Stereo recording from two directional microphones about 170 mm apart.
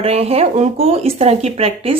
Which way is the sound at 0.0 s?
35° right (ahead or behind).